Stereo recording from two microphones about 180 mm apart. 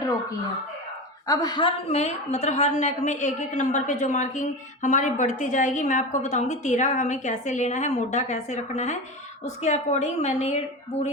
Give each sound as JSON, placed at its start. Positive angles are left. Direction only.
{"t": 1.3, "sound": "a woman's voice", "side_deg": 20}